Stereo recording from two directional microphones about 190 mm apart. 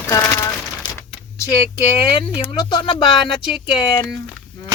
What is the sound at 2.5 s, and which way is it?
Speech, 20° left (ahead or behind).